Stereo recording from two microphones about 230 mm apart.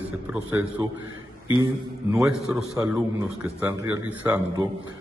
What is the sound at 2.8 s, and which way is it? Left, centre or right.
A man's voice, centre.